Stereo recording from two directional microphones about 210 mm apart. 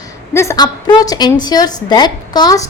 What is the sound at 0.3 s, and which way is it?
A woman's voice, 15° left (ahead or behind).